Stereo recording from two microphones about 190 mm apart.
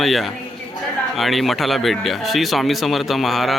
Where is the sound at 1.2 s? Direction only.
Centre (ahead or behind).